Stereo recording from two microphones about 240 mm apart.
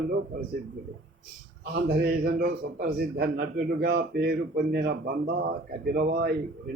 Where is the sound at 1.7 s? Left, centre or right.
Right.